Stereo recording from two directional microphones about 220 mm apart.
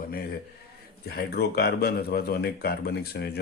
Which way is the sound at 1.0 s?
45° left (ahead or behind).